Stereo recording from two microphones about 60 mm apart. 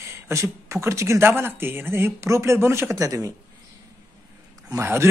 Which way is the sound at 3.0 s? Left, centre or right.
Right.